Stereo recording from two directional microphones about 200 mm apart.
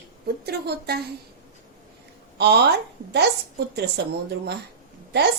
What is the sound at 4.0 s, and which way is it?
Speech, 55° right (ahead or behind).